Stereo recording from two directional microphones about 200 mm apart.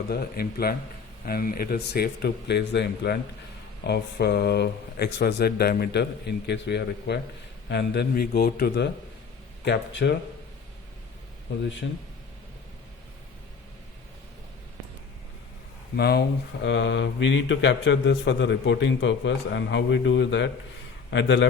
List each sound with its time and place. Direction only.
0.1 s a man's voice: 50° left (ahead or behind)
11.5 s a man's voice: 65° left (ahead or behind)
16.0 s speech: 50° left (ahead or behind)
16.6 s a man's voice: 65° left (ahead or behind)